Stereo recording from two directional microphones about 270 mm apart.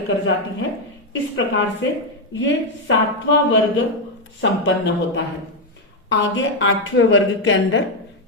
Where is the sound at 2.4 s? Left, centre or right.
Left.